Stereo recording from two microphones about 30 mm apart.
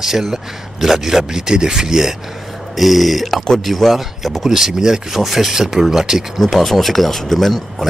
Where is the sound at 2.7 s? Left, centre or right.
Centre.